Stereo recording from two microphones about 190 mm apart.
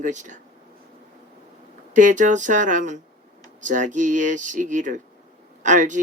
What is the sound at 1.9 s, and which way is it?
Speech, 40° right (ahead or behind).